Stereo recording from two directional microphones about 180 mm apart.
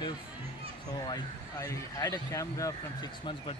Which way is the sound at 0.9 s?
20° left (ahead or behind).